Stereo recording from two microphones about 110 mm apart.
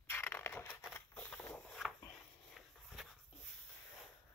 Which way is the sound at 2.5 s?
Centre (ahead or behind).